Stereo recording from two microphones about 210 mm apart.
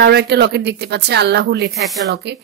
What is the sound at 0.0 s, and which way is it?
A woman's voice, 55° right (ahead or behind).